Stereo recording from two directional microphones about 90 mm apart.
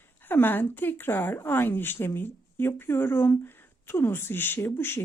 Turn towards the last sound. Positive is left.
turn(degrees=25)  # may be behind; listen again after turning